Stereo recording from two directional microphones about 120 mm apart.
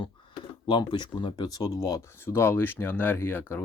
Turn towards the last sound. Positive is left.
turn(degrees=15)  # may be behind; listen again after turning